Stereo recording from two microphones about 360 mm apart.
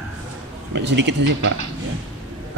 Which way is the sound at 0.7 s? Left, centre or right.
Right.